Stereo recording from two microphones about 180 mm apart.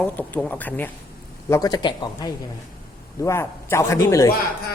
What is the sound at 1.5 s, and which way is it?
A man's voice, 20° left (ahead or behind).